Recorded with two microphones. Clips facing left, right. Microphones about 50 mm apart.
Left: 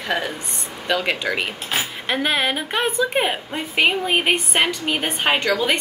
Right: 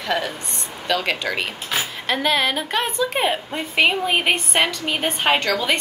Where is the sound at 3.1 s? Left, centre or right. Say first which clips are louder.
Even; centre.